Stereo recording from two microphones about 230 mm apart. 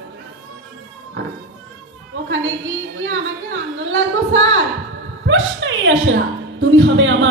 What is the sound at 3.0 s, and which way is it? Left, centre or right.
A woman's voice, right.